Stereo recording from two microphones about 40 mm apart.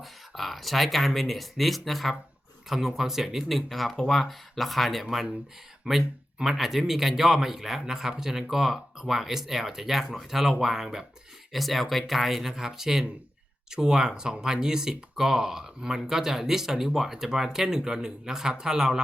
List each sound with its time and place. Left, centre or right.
0.0 s speech: centre
5.9 s speech: right
6.4 s speech: centre
11.5 s speech: centre